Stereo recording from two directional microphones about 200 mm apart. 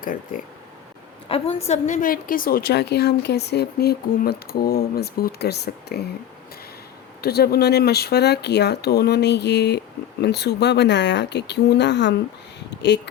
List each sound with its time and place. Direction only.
0.0 s speech: 40° left (ahead or behind)
1.3 s a woman's voice: 30° left (ahead or behind); by 6.1 s 55° left (ahead or behind)
7.2 s speech: 50° left (ahead or behind)